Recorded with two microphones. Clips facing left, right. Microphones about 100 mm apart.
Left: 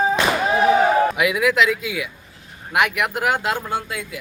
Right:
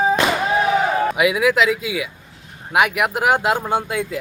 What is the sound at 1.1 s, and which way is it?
Speech, 5° right (ahead or behind).